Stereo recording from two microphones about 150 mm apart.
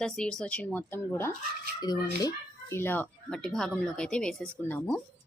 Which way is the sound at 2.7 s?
15° left (ahead or behind).